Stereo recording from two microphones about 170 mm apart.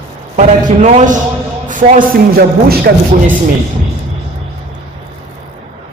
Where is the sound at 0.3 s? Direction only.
45° right (ahead or behind); by 2.8 s 65° right (ahead or behind).